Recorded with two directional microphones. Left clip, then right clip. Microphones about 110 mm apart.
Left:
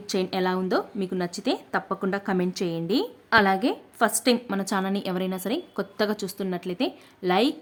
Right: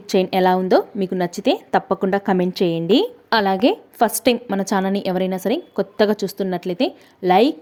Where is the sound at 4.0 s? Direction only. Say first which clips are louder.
Right 3 dB; 45° right (ahead or behind).